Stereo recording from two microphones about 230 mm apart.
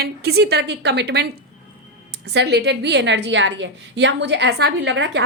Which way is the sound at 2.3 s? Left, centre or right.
Right.